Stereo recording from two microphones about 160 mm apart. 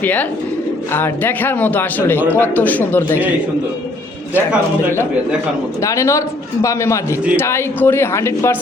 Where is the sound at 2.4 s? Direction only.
10° left (ahead or behind).